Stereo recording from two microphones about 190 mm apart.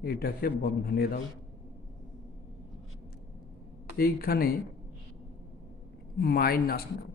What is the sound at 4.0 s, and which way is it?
Speech, 50° left (ahead or behind).